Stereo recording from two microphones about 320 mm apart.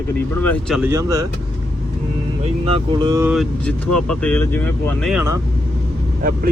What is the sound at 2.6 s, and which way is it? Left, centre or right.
Speech, centre.